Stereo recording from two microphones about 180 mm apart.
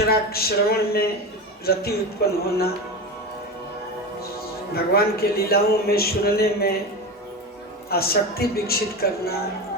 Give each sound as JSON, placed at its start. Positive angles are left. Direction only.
{"t": 0.1, "sound": "a man's voice", "side_deg": 60}
{"t": 4.7, "sound": "a man's voice", "side_deg": 60}
{"t": 7.9, "sound": "a man's voice", "side_deg": 60}